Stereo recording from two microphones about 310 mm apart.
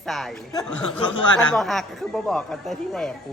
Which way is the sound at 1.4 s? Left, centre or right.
Centre.